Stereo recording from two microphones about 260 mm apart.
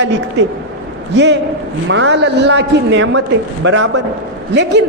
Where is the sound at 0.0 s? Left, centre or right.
Right.